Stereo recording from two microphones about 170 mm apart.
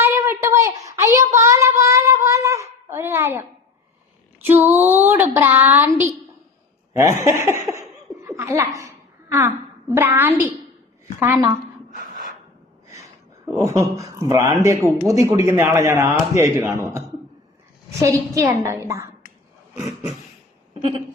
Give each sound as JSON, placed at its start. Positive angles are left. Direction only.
{"t": 0.0, "sound": "a sound", "side_deg": -15}
{"t": 4.4, "sound": "a man's voice", "side_deg": -10}
{"t": 6.9, "sound": "a man's voice", "side_deg": -15}
{"t": 7.7, "sound": "laughter", "side_deg": -15}
{"t": 9.9, "sound": "a man's voice", "side_deg": -10}
{"t": 11.9, "sound": "a sound", "side_deg": -55}
{"t": 12.9, "sound": "a man's voice", "side_deg": -20}
{"t": 18.0, "sound": "a man's voice", "side_deg": -15}